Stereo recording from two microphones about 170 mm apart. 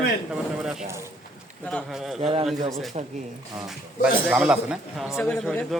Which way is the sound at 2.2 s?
35° right (ahead or behind).